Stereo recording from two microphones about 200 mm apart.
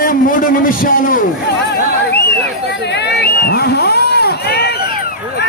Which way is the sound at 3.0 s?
55° left (ahead or behind).